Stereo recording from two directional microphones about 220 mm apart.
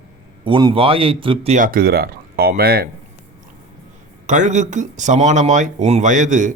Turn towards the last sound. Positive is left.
turn(degrees=-35)  # may be behind; listen again after turning